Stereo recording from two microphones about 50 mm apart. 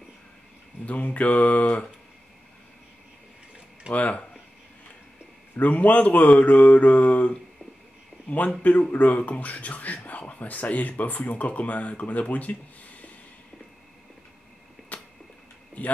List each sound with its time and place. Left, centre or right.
0.8 s mantra: left
3.9 s mantra: left
5.6 s speech: left
8.9 s speech: left
14.9 s tick-tock: left